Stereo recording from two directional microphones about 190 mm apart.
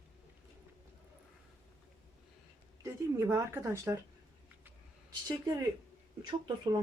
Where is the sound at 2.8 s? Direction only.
15° right (ahead or behind).